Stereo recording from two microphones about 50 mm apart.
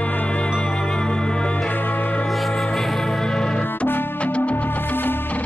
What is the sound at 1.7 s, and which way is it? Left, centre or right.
Music, left.